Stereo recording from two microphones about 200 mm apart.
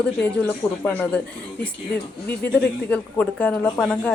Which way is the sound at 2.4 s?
10° left (ahead or behind).